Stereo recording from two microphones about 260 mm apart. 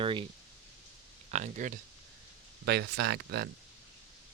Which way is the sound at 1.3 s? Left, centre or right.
Right.